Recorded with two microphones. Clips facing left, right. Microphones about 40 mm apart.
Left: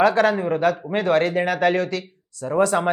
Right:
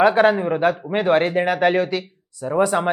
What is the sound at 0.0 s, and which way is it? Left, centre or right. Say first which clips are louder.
A woman's voice: right 2 dB; right.